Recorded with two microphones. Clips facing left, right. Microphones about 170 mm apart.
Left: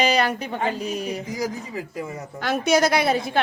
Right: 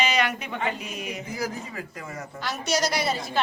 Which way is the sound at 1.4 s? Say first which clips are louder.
Left 4 dB; 20° left (ahead or behind).